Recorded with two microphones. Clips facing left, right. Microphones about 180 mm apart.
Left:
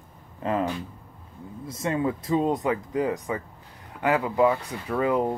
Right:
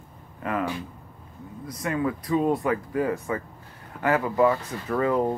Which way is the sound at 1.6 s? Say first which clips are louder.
Left 1 dB; 25° left (ahead or behind).